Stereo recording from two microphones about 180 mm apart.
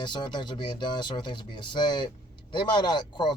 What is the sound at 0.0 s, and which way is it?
Speech, 25° left (ahead or behind).